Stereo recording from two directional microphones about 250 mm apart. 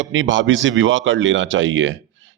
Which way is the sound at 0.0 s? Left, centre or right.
Right.